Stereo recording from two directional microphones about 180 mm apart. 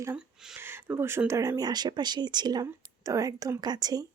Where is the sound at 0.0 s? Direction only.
10° right (ahead or behind).